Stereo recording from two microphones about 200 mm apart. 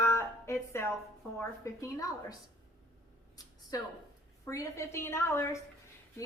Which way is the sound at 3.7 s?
15° left (ahead or behind).